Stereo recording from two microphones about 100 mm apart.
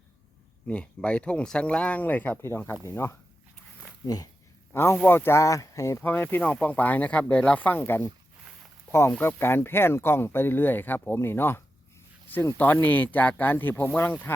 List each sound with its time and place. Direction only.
0.7 s speech: 10° left (ahead or behind)
4.0 s speech: 40° left (ahead or behind)
4.7 s speech: 25° left (ahead or behind)
6.0 s speech: 20° left (ahead or behind)